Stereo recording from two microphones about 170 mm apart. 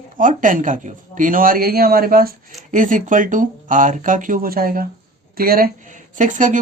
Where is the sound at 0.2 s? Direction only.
50° right (ahead or behind).